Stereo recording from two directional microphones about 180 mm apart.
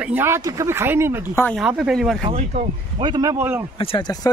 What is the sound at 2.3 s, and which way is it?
Speech, 30° right (ahead or behind).